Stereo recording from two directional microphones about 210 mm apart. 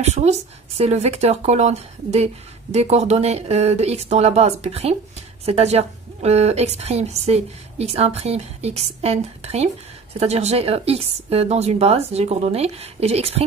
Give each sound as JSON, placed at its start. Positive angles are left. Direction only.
{"t": 0.0, "sound": "a woman's voice", "side_deg": -30}